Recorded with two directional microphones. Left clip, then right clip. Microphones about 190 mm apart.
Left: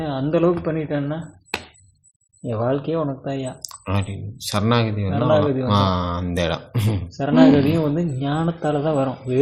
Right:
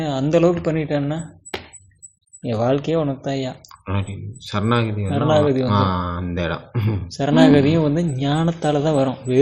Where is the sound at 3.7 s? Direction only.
40° left (ahead or behind).